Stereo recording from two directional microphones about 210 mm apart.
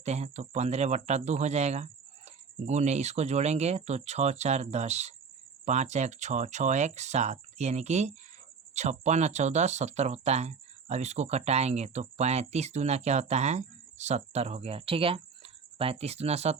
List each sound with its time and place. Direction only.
0.0 s speech: 30° right (ahead or behind)